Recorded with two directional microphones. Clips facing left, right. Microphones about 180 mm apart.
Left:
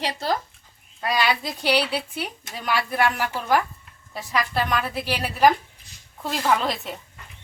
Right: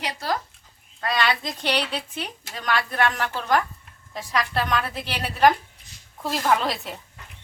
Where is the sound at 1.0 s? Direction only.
10° left (ahead or behind).